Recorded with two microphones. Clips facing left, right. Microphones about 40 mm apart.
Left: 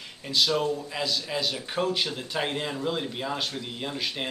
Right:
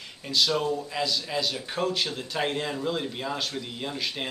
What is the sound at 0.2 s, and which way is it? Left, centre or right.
A man's voice, centre.